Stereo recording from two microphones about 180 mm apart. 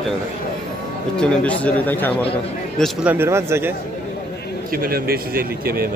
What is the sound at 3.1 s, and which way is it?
Speech, 15° right (ahead or behind).